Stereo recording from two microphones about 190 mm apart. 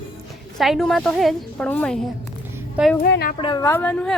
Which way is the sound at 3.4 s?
25° left (ahead or behind).